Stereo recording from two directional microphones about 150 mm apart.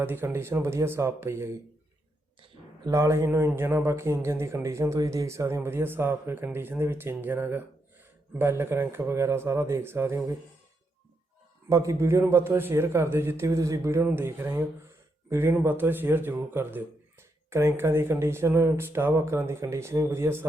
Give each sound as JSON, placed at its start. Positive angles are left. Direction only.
{"t": 0.0, "sound": "speech", "side_deg": -15}
{"t": 11.7, "sound": "speech", "side_deg": -20}